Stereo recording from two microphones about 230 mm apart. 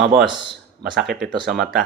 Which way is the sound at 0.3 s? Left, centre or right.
Left.